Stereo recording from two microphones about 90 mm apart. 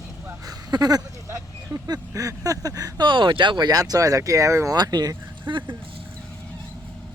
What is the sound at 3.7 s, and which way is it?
Speech, 45° right (ahead or behind).